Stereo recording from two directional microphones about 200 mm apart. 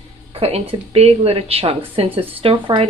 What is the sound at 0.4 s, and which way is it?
Speech, 30° right (ahead or behind).